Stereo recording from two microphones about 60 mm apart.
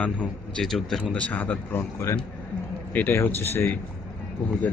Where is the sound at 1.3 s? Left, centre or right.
Left.